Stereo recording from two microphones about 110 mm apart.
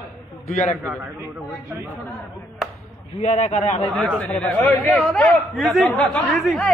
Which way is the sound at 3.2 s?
90° left.